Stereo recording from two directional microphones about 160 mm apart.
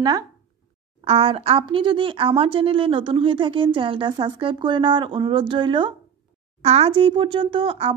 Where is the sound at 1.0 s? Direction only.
35° right (ahead or behind).